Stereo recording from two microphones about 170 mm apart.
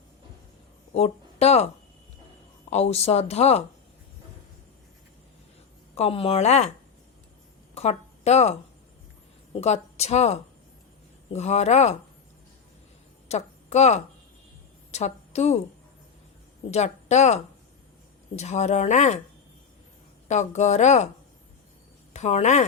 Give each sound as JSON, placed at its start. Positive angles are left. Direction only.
{"t": 0.9, "sound": "speech", "side_deg": 40}
{"t": 5.9, "sound": "speech", "side_deg": 35}
{"t": 7.8, "sound": "a woman's voice", "side_deg": 40}
{"t": 9.6, "sound": "speech", "side_deg": 40}
{"t": 13.2, "sound": "a sound", "side_deg": 40}
{"t": 14.9, "sound": "a woman's voice", "side_deg": 40}
{"t": 16.7, "sound": "speech", "side_deg": 40}
{"t": 20.2, "sound": "speech", "side_deg": 45}
{"t": 22.1, "sound": "speech", "side_deg": 40}